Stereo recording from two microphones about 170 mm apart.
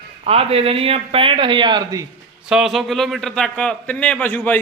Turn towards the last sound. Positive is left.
turn(degrees=10)  # may be behind; listen again after turning